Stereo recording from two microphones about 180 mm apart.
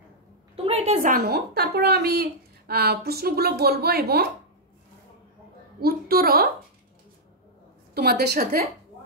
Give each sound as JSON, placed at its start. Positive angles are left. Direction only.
{"t": 0.7, "sound": "a woman's voice", "side_deg": -35}
{"t": 5.8, "sound": "a woman's voice", "side_deg": -55}
{"t": 7.9, "sound": "a woman's voice", "side_deg": -60}